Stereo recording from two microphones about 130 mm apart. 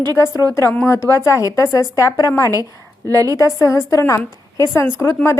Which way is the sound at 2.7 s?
20° left (ahead or behind).